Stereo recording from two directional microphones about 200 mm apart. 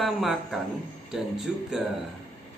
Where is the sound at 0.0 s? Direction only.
Centre (ahead or behind).